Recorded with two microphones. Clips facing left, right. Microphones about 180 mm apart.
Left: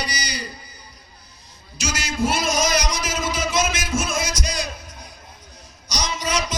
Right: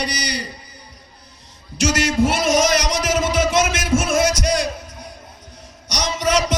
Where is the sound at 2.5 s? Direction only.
80° right.